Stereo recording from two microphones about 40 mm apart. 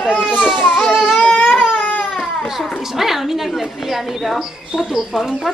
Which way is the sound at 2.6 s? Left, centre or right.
Centre.